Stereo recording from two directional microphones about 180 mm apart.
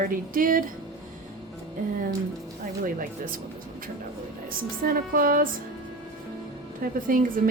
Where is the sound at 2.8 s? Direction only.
50° right (ahead or behind).